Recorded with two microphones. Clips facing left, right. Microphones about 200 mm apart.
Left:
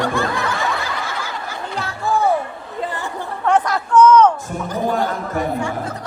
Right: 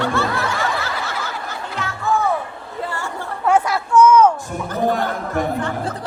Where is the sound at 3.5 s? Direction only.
10° right (ahead or behind).